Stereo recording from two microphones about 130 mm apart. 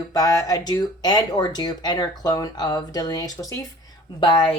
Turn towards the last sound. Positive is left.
turn(degrees=40)  # may be behind; listen again after turning